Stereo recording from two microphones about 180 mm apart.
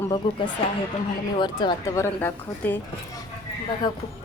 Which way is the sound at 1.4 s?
25° left (ahead or behind).